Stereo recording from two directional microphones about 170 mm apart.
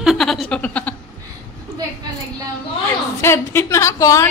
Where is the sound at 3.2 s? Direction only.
15° left (ahead or behind).